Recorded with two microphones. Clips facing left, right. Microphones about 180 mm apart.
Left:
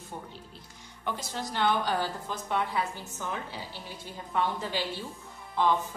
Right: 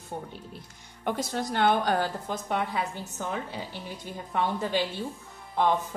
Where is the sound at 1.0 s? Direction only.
55° right (ahead or behind).